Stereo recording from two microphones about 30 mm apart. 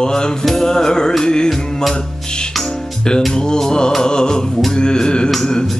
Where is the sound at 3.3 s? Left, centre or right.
Left.